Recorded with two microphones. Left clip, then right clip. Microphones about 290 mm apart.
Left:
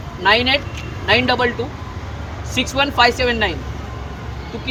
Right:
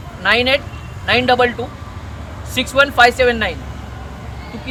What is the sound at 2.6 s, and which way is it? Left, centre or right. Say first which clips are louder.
Speech: right 4 dB; centre.